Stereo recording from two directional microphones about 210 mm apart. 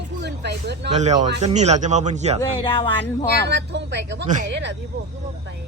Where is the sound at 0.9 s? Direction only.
35° right (ahead or behind).